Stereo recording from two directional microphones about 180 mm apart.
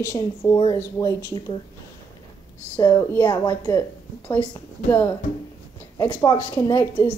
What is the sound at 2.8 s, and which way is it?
A woman's voice, 15° left (ahead or behind).